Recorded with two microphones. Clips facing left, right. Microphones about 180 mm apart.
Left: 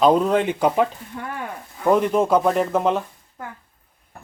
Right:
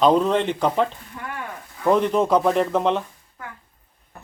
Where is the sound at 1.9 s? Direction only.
5° left (ahead or behind).